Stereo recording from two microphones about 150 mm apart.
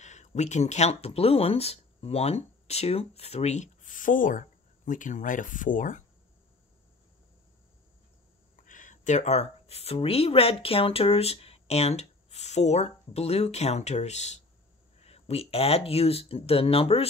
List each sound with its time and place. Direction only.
0.0 s speech: 50° left (ahead or behind)
8.6 s speech: 60° left (ahead or behind); by 17.1 s 40° left (ahead or behind)